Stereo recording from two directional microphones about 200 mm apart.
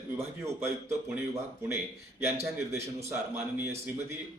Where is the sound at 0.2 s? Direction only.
15° right (ahead or behind).